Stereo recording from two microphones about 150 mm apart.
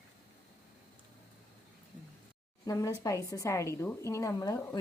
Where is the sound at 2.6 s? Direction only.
20° left (ahead or behind).